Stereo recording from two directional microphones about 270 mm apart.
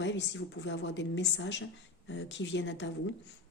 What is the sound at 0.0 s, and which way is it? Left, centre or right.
Speech, left.